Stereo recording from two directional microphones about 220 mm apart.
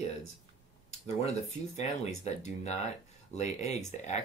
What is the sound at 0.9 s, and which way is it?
Speech, 30° left (ahead or behind).